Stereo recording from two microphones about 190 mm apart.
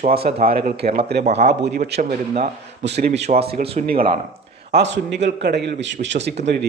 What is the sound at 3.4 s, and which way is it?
Speech, 55° right (ahead or behind).